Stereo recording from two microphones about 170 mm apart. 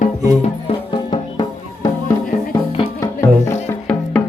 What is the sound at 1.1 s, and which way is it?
Music, 25° left (ahead or behind).